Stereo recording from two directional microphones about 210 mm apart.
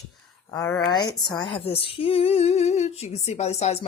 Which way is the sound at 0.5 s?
10° left (ahead or behind).